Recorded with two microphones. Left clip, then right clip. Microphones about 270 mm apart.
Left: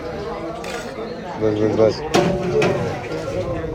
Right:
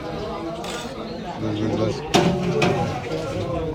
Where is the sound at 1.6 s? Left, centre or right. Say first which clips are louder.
Left 8 dB; centre.